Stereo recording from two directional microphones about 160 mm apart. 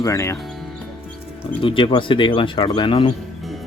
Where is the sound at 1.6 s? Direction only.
30° left (ahead or behind).